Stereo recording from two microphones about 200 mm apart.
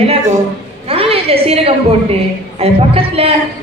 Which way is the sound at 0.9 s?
30° right (ahead or behind).